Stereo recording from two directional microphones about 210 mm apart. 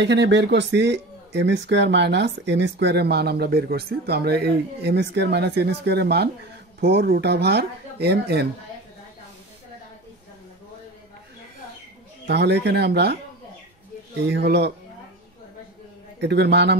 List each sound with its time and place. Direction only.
0.0 s speech: 55° right (ahead or behind)
12.3 s speech: 50° right (ahead or behind)
14.2 s speech: 55° right (ahead or behind)
16.2 s speech: 50° right (ahead or behind)